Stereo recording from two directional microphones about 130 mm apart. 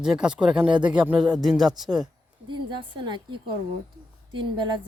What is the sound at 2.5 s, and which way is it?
A woman's voice, 35° right (ahead or behind).